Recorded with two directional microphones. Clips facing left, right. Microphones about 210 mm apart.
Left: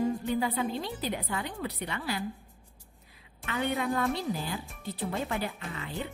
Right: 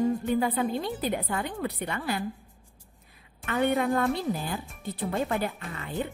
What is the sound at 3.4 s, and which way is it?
Speech, 50° right (ahead or behind).